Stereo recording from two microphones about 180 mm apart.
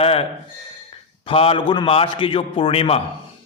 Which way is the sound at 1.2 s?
30° left (ahead or behind).